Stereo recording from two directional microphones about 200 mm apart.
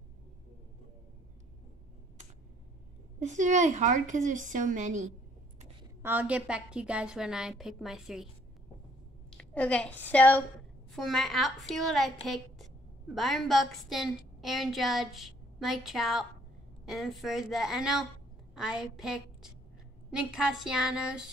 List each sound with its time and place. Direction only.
3.2 s a woman's voice: 35° right (ahead or behind)
6.0 s a woman's voice: 5° right (ahead or behind)
9.4 s a woman's voice: 5° left (ahead or behind)